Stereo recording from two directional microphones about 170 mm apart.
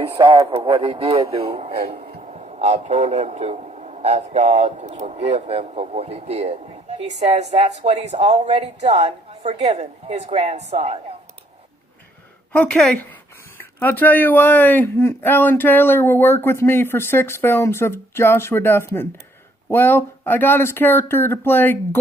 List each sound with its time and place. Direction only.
0.1 s a man's voice: 35° right (ahead or behind)
12.5 s speech: 5° left (ahead or behind)